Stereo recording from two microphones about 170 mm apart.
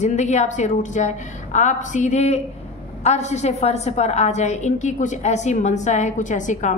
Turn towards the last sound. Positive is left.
turn(degrees=45)  # may be behind; listen again after turning